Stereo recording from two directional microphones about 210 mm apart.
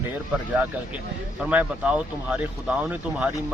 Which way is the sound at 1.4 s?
5° right (ahead or behind).